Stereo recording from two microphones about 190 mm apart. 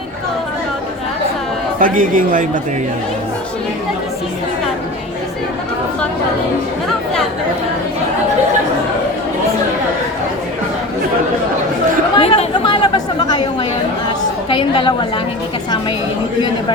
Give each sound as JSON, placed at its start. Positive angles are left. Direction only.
{"t": 1.8, "sound": "a man's voice", "side_deg": -45}
{"t": 12.1, "sound": "chatter", "side_deg": 30}
{"t": 14.5, "sound": "a woman's voice", "side_deg": 25}